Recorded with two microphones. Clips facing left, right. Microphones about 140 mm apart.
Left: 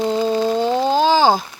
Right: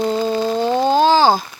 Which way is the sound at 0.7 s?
5° left (ahead or behind).